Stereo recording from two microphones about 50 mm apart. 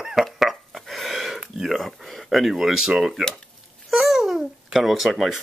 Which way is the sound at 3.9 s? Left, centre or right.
Centre.